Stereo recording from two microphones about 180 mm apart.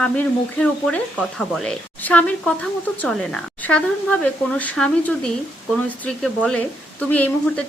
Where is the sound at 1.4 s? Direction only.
Centre (ahead or behind).